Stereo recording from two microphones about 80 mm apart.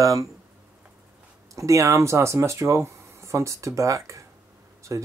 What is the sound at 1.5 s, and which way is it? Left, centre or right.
Speech, right.